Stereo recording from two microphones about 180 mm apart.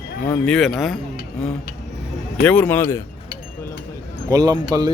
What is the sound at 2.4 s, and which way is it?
Speech, 10° left (ahead or behind).